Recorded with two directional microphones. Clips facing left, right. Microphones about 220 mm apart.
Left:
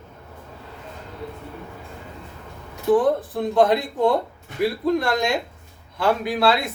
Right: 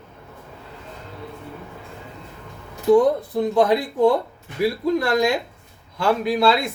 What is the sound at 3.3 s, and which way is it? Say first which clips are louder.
Speech: right 1 dB; centre (ahead or behind).